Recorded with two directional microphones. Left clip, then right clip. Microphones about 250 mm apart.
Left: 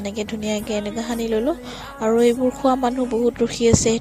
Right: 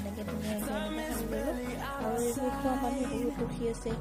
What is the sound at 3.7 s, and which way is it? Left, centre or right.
Speech, left.